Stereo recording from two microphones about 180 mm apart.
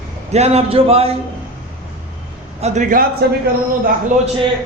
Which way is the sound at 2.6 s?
45° right (ahead or behind).